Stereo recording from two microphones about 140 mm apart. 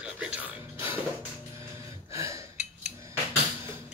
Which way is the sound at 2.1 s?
20° right (ahead or behind).